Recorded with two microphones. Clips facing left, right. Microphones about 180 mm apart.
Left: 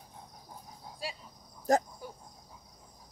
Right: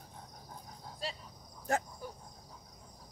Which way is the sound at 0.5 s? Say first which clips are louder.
Left 1 dB; 10° left (ahead or behind).